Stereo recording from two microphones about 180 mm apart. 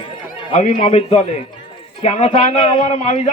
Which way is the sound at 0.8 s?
40° left (ahead or behind).